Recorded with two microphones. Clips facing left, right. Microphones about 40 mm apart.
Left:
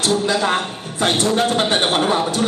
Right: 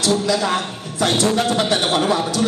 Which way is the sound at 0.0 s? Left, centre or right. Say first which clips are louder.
Even; left.